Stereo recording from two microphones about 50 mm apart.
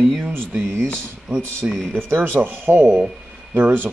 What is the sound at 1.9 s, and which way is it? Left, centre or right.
A man's voice, right.